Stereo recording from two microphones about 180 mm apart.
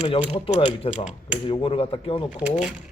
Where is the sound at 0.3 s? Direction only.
30° left (ahead or behind).